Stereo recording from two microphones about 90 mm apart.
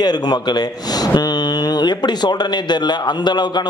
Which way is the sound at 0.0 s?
50° left (ahead or behind).